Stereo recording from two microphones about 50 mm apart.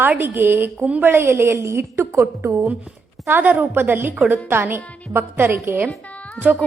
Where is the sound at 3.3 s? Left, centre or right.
Right.